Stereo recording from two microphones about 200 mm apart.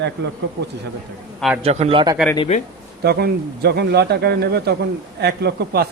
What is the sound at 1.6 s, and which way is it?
Speech, 30° right (ahead or behind).